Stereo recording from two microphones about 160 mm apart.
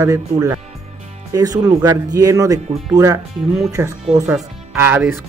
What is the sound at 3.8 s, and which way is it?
Speech, 15° right (ahead or behind).